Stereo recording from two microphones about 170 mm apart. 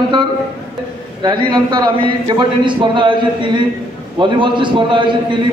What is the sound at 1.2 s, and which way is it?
A man's voice, 25° right (ahead or behind).